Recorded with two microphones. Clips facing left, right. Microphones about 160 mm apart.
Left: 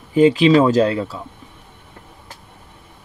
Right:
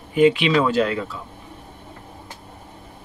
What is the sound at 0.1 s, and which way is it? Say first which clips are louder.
Speech: left 4 dB; 35° left (ahead or behind).